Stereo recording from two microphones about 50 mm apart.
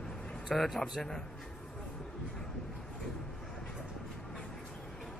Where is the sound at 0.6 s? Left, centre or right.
Centre.